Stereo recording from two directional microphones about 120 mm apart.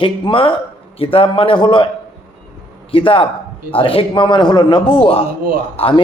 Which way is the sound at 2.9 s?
50° left (ahead or behind).